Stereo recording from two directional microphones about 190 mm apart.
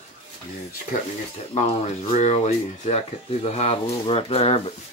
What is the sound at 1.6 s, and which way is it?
Speech, 35° left (ahead or behind).